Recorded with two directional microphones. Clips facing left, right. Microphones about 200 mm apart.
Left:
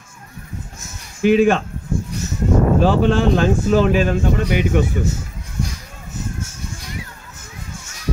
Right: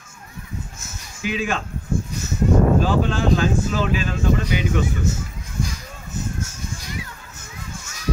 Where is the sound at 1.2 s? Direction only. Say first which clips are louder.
Left 11 dB; 55° left (ahead or behind).